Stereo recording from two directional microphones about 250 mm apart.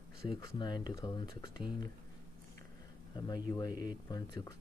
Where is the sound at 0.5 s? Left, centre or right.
Centre.